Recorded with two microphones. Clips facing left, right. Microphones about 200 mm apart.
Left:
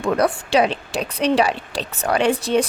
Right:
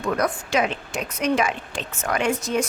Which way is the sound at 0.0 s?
30° left (ahead or behind).